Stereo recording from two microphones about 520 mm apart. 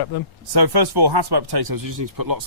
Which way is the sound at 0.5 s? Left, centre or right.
Right.